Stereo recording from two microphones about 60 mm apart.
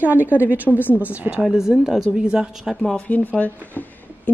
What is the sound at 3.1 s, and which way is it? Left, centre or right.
Speech, left.